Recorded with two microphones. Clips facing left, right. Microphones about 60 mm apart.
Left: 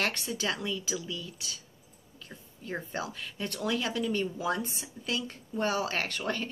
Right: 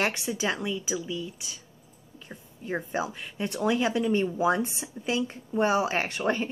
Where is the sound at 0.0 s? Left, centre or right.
Centre.